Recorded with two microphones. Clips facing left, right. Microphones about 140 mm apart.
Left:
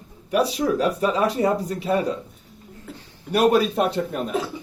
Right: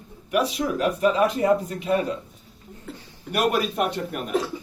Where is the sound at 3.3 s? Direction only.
35° left (ahead or behind).